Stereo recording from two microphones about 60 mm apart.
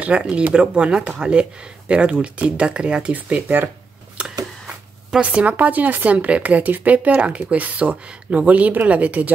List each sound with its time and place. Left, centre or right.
0.0 s speech: centre
3.4 s speech: right
4.2 s a sound: centre
5.2 s speech: right